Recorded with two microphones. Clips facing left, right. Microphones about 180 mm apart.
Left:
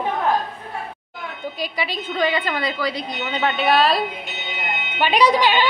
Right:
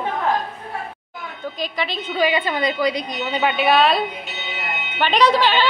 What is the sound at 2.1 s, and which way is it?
Speech, 10° right (ahead or behind).